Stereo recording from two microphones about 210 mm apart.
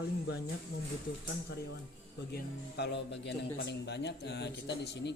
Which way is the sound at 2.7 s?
55° left (ahead or behind).